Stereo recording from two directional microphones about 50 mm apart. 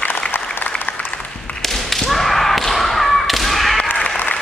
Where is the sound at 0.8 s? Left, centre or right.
Left.